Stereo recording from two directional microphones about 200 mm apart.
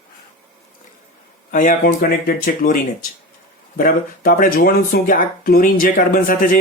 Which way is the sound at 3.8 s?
45° left (ahead or behind).